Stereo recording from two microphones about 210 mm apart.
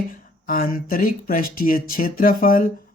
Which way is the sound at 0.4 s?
40° left (ahead or behind).